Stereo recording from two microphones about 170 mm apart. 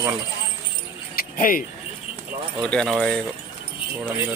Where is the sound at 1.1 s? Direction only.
55° left (ahead or behind).